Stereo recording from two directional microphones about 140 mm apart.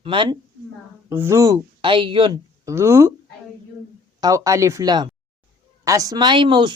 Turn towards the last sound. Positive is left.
turn(degrees=-35)  # may be behind; listen again after turning